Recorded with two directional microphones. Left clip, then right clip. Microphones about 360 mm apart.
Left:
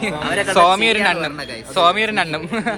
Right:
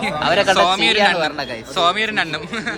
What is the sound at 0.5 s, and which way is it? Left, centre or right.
A man's voice, centre.